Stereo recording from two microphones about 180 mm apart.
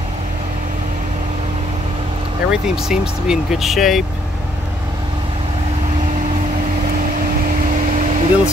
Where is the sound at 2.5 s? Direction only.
5° right (ahead or behind).